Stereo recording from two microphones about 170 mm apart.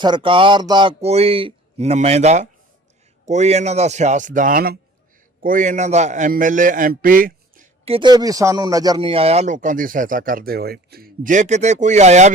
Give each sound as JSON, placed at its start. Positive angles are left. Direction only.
{"t": 0.0, "sound": "speech", "side_deg": -30}
{"t": 7.9, "sound": "speech", "side_deg": -30}